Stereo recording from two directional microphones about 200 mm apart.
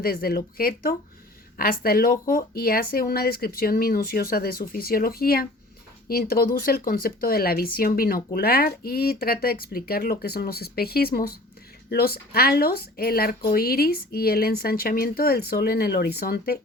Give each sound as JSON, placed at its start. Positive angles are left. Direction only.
{"t": 0.0, "sound": "speech", "side_deg": 50}